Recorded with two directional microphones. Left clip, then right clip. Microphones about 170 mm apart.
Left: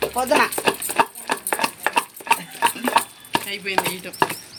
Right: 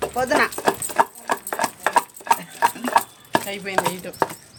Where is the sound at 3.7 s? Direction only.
75° right (ahead or behind).